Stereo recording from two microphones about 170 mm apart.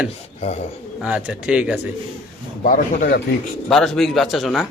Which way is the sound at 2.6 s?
55° left (ahead or behind).